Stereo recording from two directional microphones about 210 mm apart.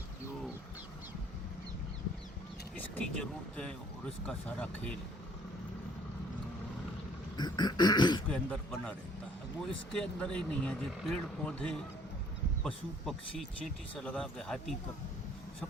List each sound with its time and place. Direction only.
2.7 s speech: 5° left (ahead or behind)
7.3 s beatboxing: 20° left (ahead or behind)
8.3 s speech: 5° left (ahead or behind)